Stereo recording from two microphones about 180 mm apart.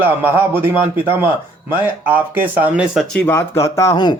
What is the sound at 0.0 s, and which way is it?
A man's voice, 10° right (ahead or behind).